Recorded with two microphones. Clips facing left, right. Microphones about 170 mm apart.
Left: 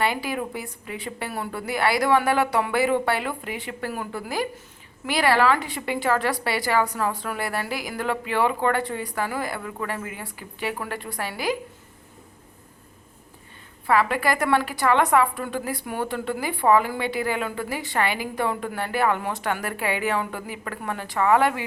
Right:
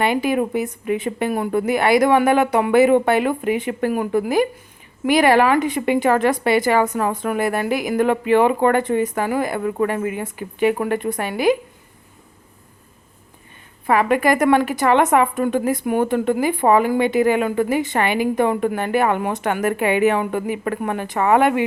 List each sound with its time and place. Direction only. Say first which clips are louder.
0.0 s speech: right 7 dB; 20° right (ahead or behind)
9.6 s speech: right 12 dB; 35° right (ahead or behind)
9.8 s speech: right 10 dB; 20° right (ahead or behind)
13.8 s speech: right 5 dB; 20° right (ahead or behind)